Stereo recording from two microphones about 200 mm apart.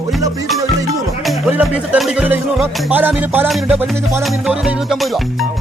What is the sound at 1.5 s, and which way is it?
Music, 5° right (ahead or behind).